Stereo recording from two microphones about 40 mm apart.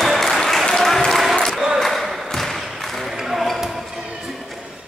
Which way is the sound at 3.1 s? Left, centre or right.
Centre.